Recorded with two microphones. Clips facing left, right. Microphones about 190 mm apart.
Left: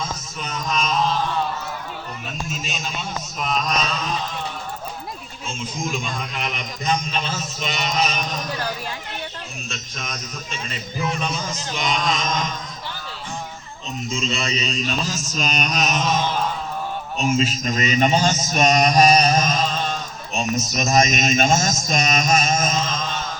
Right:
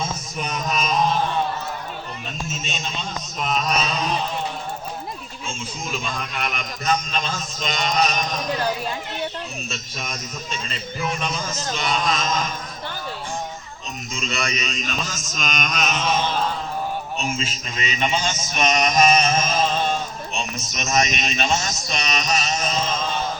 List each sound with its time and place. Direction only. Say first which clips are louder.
0.3 s a sound: right 1 dB; 15° right (ahead or behind)
2.5 s a sound: even; centre (ahead or behind)
6.1 s speech: even; 20° left (ahead or behind)
7.3 s mantra: even; 5° left (ahead or behind)
9.6 s a man's voice: right 1 dB; 5° right (ahead or behind)
11.2 s mantra: even; 15° left (ahead or behind)
14.1 s speech: left 2 dB; 25° left (ahead or behind); by 16.1 s 40° left (ahead or behind)
17.2 s speech: left 7 dB; 40° left (ahead or behind)